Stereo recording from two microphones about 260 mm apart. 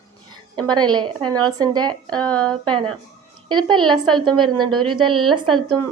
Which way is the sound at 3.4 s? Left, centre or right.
Centre.